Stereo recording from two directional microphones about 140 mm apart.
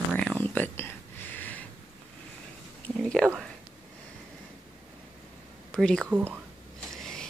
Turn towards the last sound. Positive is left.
turn(degrees=5)  # may be behind; listen again after turning